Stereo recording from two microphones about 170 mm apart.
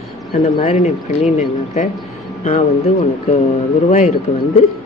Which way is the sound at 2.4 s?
40° left (ahead or behind).